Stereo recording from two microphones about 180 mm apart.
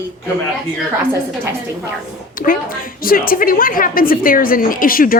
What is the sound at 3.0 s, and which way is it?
A woman's voice, 55° left (ahead or behind).